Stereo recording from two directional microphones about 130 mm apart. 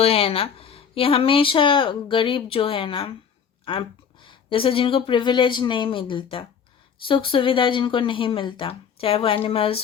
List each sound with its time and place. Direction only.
0.0 s speech: 50° left (ahead or behind)